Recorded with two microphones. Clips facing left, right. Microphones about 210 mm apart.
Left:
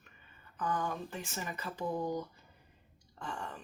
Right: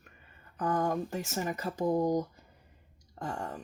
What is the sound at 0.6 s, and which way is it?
Speech, 40° right (ahead or behind).